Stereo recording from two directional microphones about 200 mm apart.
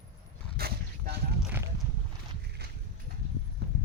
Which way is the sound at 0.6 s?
50° right (ahead or behind).